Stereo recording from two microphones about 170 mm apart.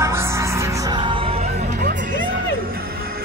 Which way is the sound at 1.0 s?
30° right (ahead or behind).